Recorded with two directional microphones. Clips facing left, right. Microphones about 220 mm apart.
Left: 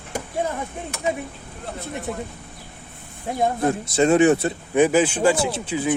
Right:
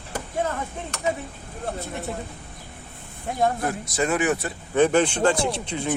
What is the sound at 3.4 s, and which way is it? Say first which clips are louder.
Speech: left 3 dB; 25° left (ahead or behind).